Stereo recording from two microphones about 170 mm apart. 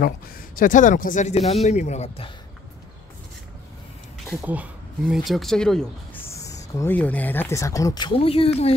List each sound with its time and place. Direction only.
0.6 s speech: 50° left (ahead or behind)
4.5 s speech: 5° right (ahead or behind)
6.2 s speech: 20° left (ahead or behind); by 8.7 s 35° left (ahead or behind)